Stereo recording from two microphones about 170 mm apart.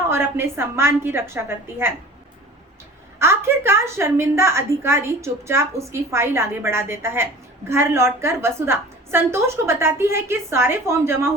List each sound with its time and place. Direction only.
0.1 s a woman's voice: 15° right (ahead or behind)
3.2 s a woman's voice: 15° right (ahead or behind)